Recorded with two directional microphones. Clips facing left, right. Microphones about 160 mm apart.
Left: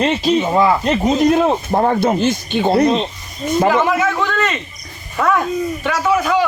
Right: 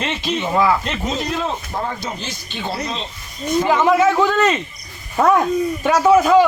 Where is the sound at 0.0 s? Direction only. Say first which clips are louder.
Left 8 dB; 35° left (ahead or behind).